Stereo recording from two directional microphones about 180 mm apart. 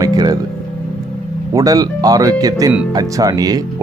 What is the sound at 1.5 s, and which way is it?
Speech, 20° right (ahead or behind).